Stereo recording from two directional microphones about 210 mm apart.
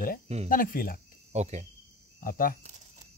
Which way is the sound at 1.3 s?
30° right (ahead or behind).